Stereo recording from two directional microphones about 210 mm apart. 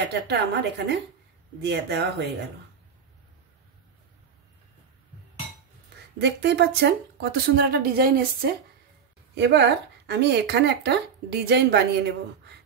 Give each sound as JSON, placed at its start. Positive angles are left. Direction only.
{"t": 0.1, "sound": "speech", "side_deg": -55}
{"t": 6.1, "sound": "speech", "side_deg": -55}